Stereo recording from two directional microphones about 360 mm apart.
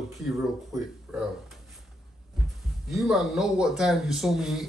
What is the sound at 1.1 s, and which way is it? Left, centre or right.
Speech, centre.